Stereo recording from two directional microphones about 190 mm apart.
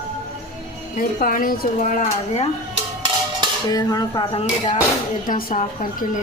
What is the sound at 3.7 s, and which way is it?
Speech, 20° left (ahead or behind).